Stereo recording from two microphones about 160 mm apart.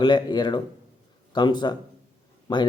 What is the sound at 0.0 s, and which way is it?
Speech, 25° left (ahead or behind).